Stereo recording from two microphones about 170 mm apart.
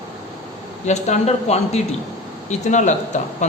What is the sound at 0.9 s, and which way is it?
Speech, 45° left (ahead or behind).